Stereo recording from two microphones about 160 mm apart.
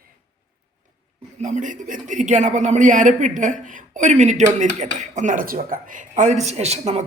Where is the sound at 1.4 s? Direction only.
50° right (ahead or behind).